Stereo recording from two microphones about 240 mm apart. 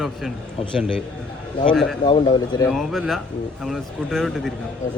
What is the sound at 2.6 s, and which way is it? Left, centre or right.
Speech, centre.